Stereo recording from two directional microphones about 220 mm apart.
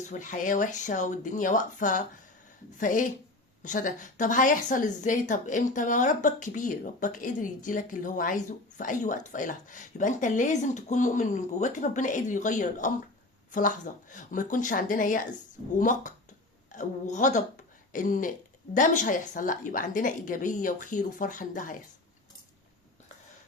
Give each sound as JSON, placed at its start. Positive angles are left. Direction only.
{"t": 0.0, "sound": "a woman's voice", "side_deg": 35}